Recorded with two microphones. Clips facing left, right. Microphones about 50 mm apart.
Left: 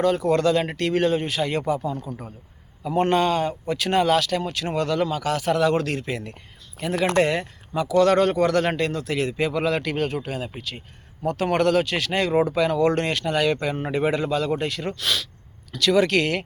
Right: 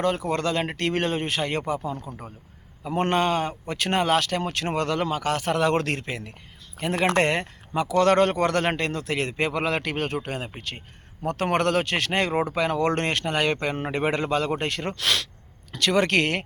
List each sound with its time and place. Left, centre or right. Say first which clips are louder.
0.2 s speech: left 5 dB; right
6.7 s speech: left 1 dB; right
15.7 s speech: left 2 dB; right